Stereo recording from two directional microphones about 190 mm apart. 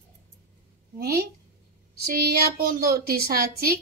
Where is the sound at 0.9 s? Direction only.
55° right (ahead or behind).